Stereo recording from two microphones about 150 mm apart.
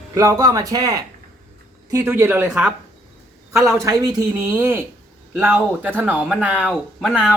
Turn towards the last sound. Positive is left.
turn(degrees=5)  # may be behind; listen again after turning